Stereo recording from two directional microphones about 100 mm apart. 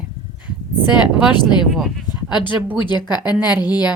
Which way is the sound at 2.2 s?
50° left (ahead or behind).